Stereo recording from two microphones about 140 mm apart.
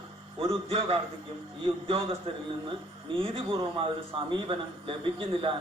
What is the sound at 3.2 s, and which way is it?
Speech, 40° right (ahead or behind).